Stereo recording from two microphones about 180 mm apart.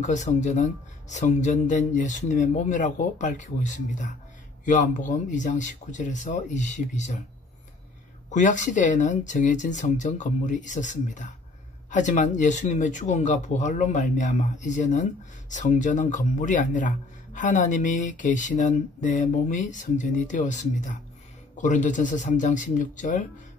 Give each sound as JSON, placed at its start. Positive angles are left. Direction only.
{"t": 0.0, "sound": "a man's voice", "side_deg": 40}
{"t": 8.3, "sound": "a man's voice", "side_deg": 45}